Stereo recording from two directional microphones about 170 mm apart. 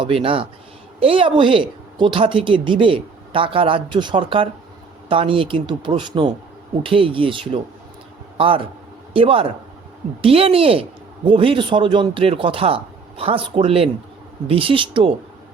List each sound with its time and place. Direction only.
0.0 s a woman's voice: 30° right (ahead or behind)